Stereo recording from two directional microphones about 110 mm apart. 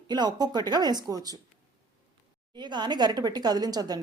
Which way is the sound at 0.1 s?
40° right (ahead or behind).